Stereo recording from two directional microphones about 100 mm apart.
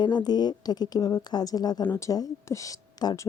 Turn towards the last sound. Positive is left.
turn(degrees=40)  # may be behind; listen again after turning